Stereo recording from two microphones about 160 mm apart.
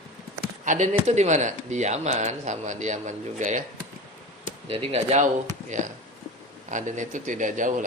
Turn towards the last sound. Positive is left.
turn(degrees=-55)  # may be behind; listen again after turning